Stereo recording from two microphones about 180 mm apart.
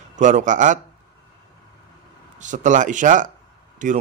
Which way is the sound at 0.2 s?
45° right (ahead or behind).